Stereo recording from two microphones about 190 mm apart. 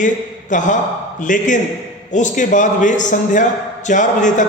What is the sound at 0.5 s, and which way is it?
A man's voice, 40° left (ahead or behind).